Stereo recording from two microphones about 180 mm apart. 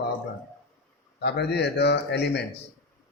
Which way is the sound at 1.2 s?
65° left (ahead or behind).